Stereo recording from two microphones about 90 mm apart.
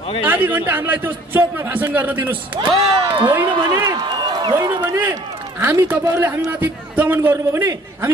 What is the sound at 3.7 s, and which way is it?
A man's voice, 50° right (ahead or behind).